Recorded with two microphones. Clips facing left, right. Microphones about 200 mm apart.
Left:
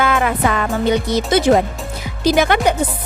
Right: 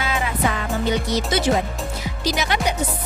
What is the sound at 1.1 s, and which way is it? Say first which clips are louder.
A woman's voice: left 8 dB; 50° left (ahead or behind).